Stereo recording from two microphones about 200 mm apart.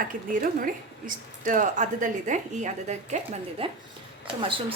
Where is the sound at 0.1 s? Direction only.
45° right (ahead or behind).